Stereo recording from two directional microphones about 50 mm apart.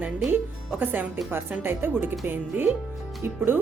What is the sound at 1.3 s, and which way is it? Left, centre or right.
Speech, right.